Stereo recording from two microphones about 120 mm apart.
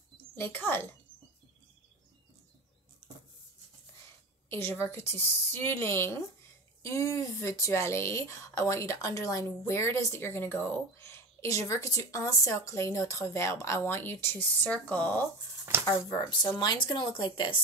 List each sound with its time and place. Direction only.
0.4 s speech: 20° left (ahead or behind)
4.5 s speech: 20° left (ahead or behind)
16.5 s speech: 40° left (ahead or behind)